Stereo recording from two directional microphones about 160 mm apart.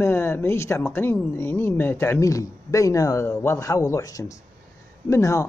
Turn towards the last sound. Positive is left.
turn(degrees=20)  # may be behind; listen again after turning